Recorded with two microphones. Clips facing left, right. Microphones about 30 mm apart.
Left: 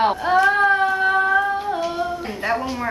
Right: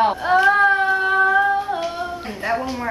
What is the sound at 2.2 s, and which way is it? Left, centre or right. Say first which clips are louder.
Speech: even; centre.